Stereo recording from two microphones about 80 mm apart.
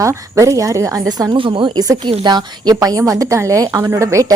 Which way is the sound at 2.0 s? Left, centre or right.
Right.